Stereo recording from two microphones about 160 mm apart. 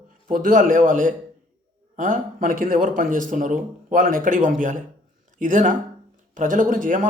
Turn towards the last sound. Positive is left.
turn(degrees=-55)  # may be behind; listen again after turning